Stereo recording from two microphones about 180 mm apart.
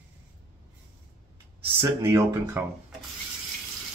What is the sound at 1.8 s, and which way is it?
Speech, 15° right (ahead or behind).